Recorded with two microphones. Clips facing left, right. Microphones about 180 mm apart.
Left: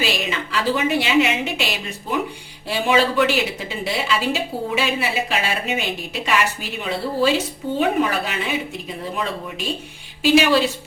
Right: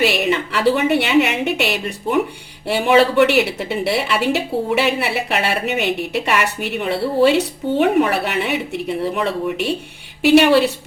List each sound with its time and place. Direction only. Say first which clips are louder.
0.0 s a woman's voice: right 7 dB; 65° right (ahead or behind)